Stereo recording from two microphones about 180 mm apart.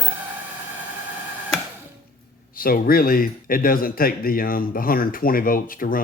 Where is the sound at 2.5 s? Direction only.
55° left (ahead or behind).